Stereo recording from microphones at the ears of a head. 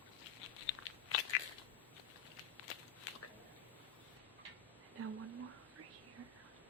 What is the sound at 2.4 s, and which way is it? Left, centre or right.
Walk, left.